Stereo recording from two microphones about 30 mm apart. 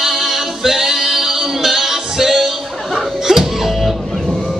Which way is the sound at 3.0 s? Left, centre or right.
Centre.